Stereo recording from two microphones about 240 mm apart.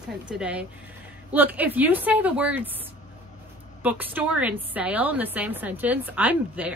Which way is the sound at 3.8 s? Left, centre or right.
Centre.